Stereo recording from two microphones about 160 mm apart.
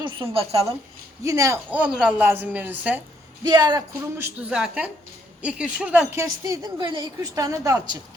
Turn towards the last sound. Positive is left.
turn(degrees=-20)  # may be behind; listen again after turning